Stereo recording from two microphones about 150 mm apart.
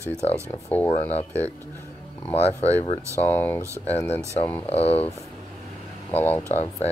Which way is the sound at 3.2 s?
15° left (ahead or behind).